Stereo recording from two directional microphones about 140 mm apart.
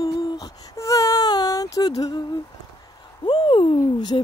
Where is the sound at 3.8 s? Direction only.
30° left (ahead or behind).